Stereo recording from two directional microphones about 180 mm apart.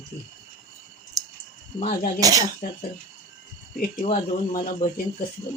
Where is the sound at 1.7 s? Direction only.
40° left (ahead or behind).